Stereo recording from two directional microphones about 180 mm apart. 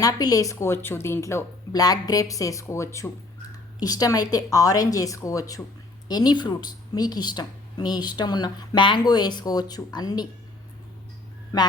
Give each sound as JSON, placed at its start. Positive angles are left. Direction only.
{"t": 0.0, "sound": "a woman's voice", "side_deg": 20}
{"t": 11.5, "sound": "speech", "side_deg": 20}